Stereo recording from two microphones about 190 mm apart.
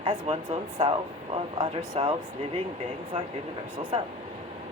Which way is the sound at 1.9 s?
35° right (ahead or behind).